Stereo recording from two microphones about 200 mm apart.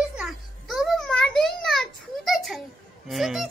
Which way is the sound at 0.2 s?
Centre (ahead or behind).